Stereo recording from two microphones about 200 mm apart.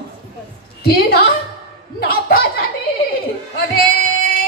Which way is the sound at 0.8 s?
55° left (ahead or behind).